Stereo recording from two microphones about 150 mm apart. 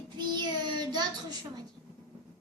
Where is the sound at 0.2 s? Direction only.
30° right (ahead or behind).